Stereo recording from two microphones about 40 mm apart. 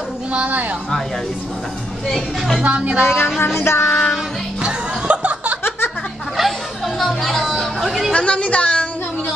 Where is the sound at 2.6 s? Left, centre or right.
Right.